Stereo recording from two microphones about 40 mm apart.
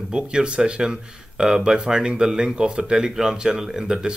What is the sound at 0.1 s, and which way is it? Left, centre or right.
Speech, right.